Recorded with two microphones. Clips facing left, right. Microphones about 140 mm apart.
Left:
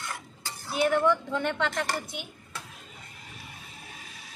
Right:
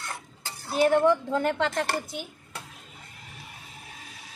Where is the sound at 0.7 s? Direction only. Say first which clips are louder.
Right 3 dB; 35° right (ahead or behind).